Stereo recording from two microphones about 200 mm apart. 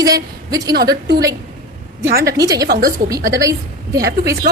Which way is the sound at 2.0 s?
50° right (ahead or behind).